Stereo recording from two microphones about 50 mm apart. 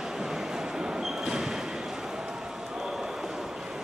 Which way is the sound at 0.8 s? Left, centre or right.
Centre.